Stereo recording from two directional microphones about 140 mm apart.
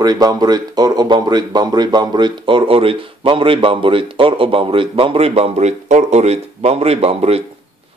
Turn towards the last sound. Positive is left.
turn(degrees=-45)  # may be behind; listen again after turning